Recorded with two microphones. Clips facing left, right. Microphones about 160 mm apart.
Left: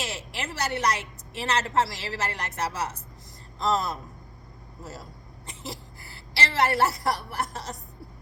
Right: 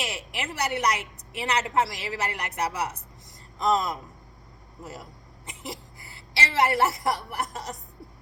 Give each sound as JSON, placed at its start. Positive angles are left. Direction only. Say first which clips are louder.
{"t": 0.0, "sound": "a woman's voice", "louder": "right 1 dB", "side_deg": -15}
{"t": 5.5, "sound": "a sound", "louder": "right 1 dB", "side_deg": -15}
{"t": 7.0, "sound": "a woman's voice", "louder": "even", "side_deg": -15}